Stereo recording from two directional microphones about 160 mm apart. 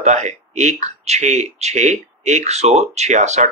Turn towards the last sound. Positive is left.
turn(degrees=-45)  # may be behind; listen again after turning